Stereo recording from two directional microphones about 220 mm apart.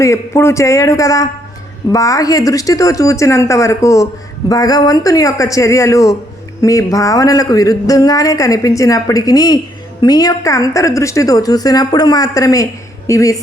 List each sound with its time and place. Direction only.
0.0 s speech: 10° left (ahead or behind)